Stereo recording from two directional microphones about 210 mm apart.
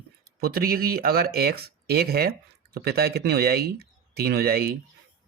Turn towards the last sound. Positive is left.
turn(degrees=-45)  # may be behind; listen again after turning